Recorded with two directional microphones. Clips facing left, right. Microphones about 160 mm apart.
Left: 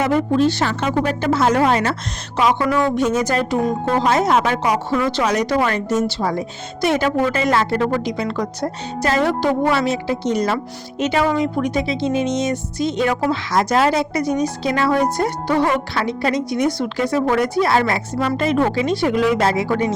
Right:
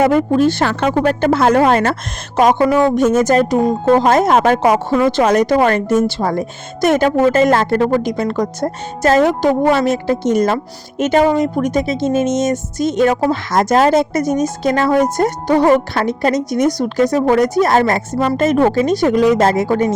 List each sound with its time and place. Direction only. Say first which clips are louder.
0.0 s a woman's voice: right 4 dB; 50° right (ahead or behind)